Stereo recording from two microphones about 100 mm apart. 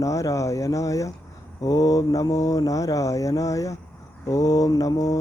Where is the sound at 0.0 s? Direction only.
35° left (ahead or behind).